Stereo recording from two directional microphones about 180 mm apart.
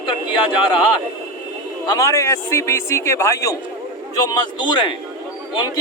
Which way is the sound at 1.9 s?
15° left (ahead or behind).